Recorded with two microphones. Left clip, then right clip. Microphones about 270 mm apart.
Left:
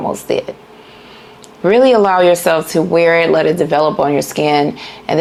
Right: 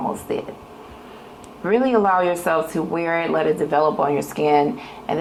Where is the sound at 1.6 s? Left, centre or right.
Left.